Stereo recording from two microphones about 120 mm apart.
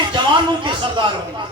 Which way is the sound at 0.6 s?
40° right (ahead or behind).